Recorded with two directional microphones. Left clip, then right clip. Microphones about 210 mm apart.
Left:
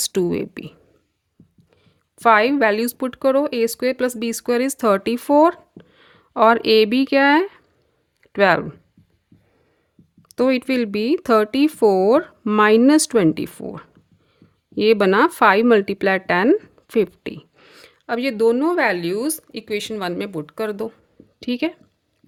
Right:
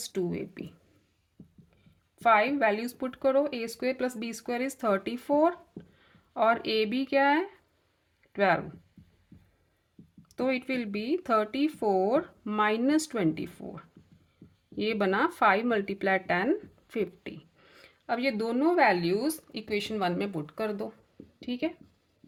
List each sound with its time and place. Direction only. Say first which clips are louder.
0.0 s speech: left 12 dB; 55° left (ahead or behind)
1.7 s speech: left 9 dB; 50° left (ahead or behind)
10.2 s speech: left 11 dB; 50° left (ahead or behind)